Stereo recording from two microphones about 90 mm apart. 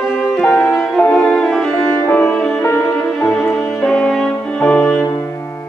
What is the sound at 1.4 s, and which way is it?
Music, 5° left (ahead or behind).